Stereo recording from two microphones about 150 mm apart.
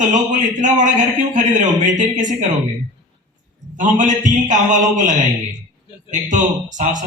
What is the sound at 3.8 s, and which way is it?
A man's voice, 55° right (ahead or behind).